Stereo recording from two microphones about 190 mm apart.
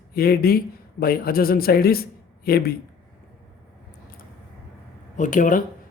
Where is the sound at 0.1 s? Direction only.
55° left (ahead or behind).